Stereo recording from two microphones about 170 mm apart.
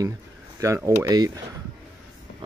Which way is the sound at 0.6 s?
20° right (ahead or behind).